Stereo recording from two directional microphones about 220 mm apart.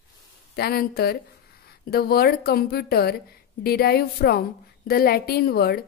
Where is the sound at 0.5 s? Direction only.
45° left (ahead or behind).